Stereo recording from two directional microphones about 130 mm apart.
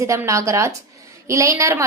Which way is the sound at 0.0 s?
25° right (ahead or behind).